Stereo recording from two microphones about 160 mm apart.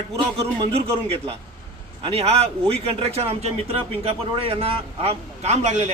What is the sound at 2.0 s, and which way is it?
Speech, 40° right (ahead or behind).